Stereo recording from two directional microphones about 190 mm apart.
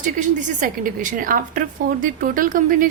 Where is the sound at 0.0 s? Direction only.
40° right (ahead or behind).